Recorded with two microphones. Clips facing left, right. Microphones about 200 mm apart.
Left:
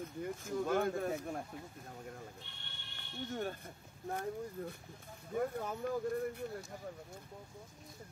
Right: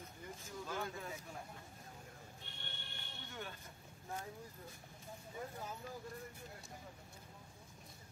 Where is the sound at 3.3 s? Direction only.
45° left (ahead or behind).